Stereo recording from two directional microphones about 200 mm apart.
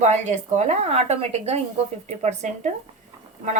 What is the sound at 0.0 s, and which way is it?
A woman's voice, 35° right (ahead or behind).